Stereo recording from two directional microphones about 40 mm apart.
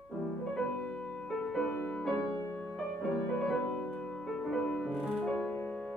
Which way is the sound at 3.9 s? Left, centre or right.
Centre.